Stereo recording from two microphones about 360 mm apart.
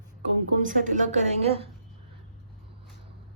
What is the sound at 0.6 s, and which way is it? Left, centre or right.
A woman's voice, right.